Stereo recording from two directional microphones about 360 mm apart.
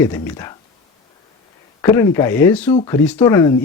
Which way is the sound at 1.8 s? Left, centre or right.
Centre.